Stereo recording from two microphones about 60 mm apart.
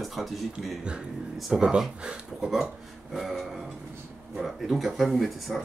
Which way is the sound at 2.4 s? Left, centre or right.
Centre.